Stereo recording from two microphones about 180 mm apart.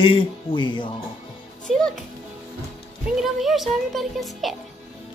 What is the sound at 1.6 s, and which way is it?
Speech, centre (ahead or behind).